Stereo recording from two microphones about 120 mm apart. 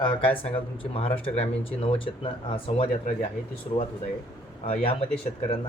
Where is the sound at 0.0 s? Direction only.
45° left (ahead or behind).